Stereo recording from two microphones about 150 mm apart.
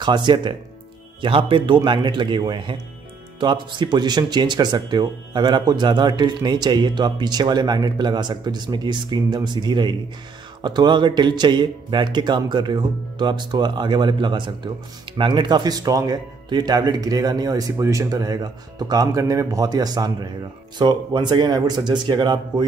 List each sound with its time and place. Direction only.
0.0 s speech: 30° right (ahead or behind)